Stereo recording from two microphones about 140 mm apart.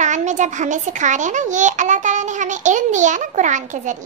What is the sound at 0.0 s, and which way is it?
A woman's voice, 60° right (ahead or behind).